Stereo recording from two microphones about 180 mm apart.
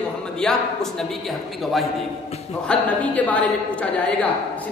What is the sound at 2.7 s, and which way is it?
Speech, 10° left (ahead or behind).